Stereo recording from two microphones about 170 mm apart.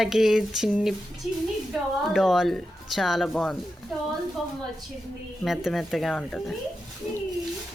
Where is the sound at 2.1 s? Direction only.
Centre (ahead or behind).